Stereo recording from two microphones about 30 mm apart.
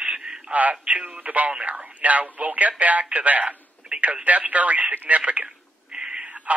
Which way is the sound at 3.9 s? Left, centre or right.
Right.